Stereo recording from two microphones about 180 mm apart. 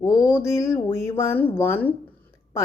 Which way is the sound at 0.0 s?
20° left (ahead or behind).